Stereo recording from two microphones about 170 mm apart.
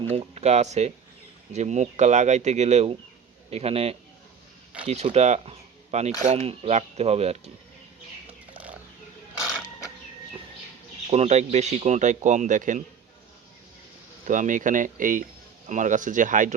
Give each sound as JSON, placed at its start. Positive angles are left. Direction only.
{"t": 0.1, "sound": "speech", "side_deg": -40}
{"t": 11.1, "sound": "speech", "side_deg": -40}
{"t": 14.3, "sound": "speech", "side_deg": -50}